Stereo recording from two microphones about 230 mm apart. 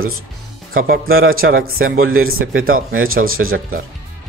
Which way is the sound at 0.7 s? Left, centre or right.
Right.